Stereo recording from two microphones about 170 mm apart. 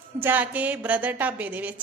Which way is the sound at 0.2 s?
10° right (ahead or behind).